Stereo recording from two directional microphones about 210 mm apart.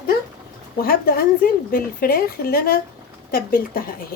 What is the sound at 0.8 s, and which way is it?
A woman's voice, 45° left (ahead or behind).